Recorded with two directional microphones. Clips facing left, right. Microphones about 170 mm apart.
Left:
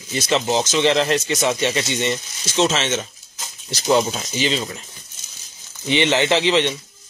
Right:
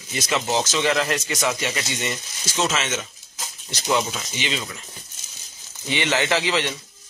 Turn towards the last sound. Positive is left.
turn(degrees=20)  # may be behind; listen again after turning